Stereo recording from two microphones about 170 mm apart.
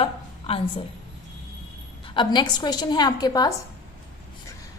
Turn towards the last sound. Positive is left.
turn(degrees=25)  # may be behind; listen again after turning